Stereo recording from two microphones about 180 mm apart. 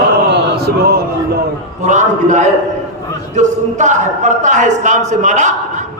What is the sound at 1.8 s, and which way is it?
A man's voice, 40° right (ahead or behind).